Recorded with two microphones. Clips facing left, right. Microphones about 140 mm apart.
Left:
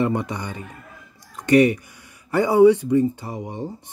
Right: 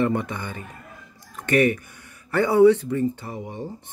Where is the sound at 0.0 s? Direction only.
15° left (ahead or behind).